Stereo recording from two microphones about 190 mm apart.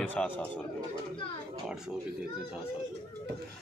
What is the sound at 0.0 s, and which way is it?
Speech, 10° left (ahead or behind).